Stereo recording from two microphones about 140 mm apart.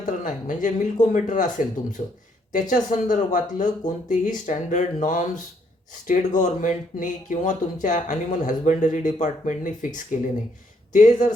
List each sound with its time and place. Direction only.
0.0 s speech: 65° left (ahead or behind)